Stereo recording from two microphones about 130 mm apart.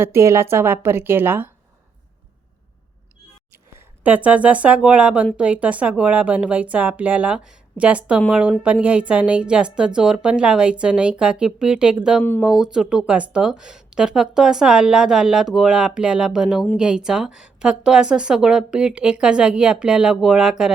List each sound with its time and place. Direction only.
0.0 s speech: 20° right (ahead or behind)
4.0 s speech: 10° right (ahead or behind)